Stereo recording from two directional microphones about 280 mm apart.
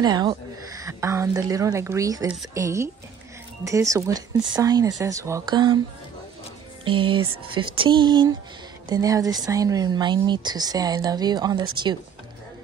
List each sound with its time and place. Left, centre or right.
0.0 s speech: centre
6.8 s speech: centre